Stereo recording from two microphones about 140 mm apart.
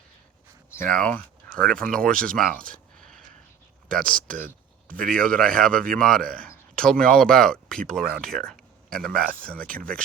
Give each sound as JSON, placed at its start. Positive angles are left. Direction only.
{"t": 0.7, "sound": "speech", "side_deg": 10}
{"t": 3.0, "sound": "a sound", "side_deg": 5}
{"t": 3.8, "sound": "speech", "side_deg": 5}